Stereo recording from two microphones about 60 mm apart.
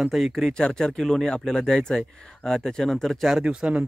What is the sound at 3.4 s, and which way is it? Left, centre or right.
Speech, centre.